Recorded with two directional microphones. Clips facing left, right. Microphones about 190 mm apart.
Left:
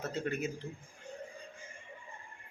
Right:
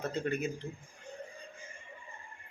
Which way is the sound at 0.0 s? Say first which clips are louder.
Right 2 dB; 5° left (ahead or behind).